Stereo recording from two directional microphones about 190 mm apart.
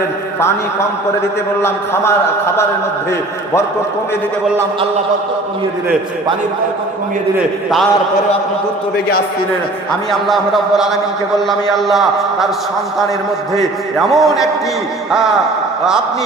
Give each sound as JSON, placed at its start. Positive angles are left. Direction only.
{"t": 1.6, "sound": "a man's voice", "side_deg": 10}
{"t": 10.1, "sound": "a man's voice", "side_deg": 0}
{"t": 14.1, "sound": "a man's voice", "side_deg": 0}